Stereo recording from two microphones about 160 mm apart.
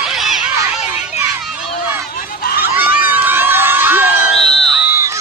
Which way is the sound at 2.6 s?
10° right (ahead or behind).